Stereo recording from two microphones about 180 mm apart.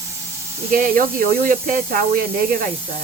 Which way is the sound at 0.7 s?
50° right (ahead or behind).